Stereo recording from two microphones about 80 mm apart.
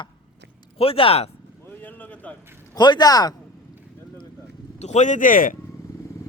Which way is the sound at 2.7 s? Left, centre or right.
Left.